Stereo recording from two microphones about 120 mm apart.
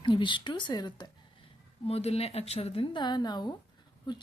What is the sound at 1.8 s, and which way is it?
A woman's voice, 55° left (ahead or behind).